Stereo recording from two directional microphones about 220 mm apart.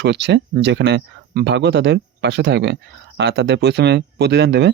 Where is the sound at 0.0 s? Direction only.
50° right (ahead or behind).